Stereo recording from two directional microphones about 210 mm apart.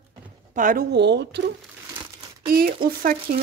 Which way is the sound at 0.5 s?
40° right (ahead or behind).